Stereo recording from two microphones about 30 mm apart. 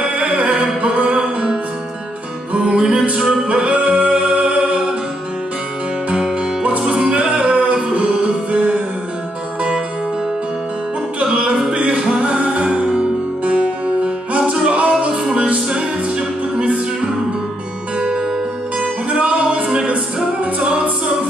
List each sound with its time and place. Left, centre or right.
0.4 s music: right
2.5 s music: right
6.9 s music: right
11.3 s music: right
12.6 s music: right
14.0 s music: right
15.7 s music: right
19.0 s music: right